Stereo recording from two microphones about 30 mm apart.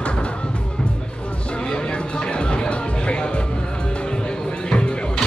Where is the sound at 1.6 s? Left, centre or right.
Left.